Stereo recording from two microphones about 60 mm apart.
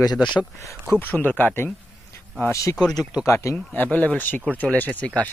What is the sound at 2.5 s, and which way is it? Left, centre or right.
Speech, left.